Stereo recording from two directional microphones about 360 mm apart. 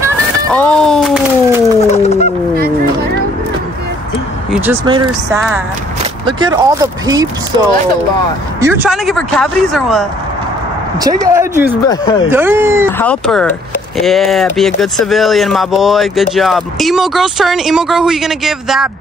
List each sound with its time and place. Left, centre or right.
0.5 s a sound: centre
1.9 s fowl: centre
4.5 s speech: centre